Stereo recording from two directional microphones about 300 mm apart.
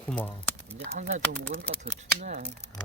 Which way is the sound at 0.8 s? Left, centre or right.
Right.